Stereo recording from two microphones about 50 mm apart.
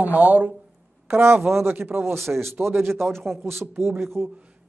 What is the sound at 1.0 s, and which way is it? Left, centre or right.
Speech, right.